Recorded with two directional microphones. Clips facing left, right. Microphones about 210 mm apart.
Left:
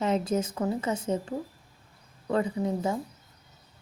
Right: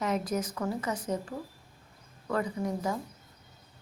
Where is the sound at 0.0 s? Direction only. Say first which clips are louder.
Left 4 dB; 25° left (ahead or behind).